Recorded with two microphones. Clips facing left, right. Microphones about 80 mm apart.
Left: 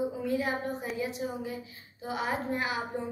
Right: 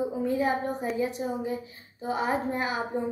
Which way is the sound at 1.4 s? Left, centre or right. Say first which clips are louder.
Right 5 dB; right.